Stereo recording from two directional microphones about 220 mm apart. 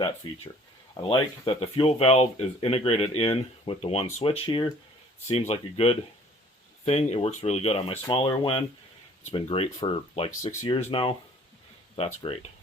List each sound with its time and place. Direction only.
0.9 s speech: 25° left (ahead or behind)